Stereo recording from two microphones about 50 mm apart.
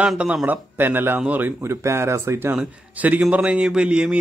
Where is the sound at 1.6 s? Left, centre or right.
Right.